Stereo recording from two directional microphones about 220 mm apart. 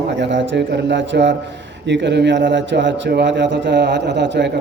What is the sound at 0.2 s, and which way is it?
A man's voice, 55° right (ahead or behind).